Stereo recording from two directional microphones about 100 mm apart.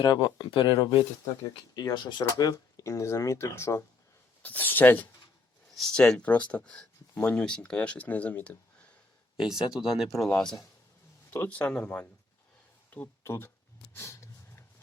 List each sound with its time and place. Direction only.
0.3 s speech: 50° left (ahead or behind)
1.7 s speech: 45° left (ahead or behind)
4.4 s speech: 20° left (ahead or behind)
5.7 s speech: 5° left (ahead or behind)
9.4 s speech: 5° right (ahead or behind)
11.3 s speech: 20° left (ahead or behind)
12.9 s a sound: 20° left (ahead or behind)
13.9 s snort: 30° left (ahead or behind)